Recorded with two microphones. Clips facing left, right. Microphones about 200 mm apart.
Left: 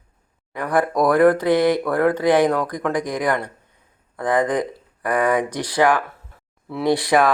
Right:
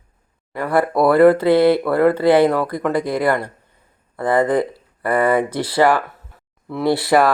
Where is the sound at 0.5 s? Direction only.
5° right (ahead or behind).